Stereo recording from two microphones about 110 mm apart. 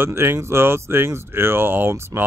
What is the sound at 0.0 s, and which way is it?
Speech, 20° right (ahead or behind).